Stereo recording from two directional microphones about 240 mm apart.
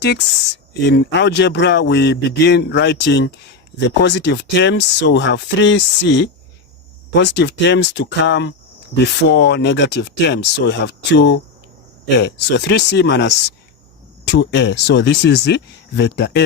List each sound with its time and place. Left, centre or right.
0.7 s speech: left